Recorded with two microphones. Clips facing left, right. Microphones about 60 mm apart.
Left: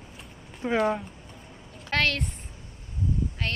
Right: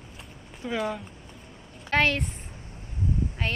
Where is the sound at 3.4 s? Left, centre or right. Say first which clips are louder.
Right 2 dB; centre.